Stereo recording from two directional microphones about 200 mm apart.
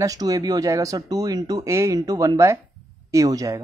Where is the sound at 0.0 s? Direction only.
15° right (ahead or behind).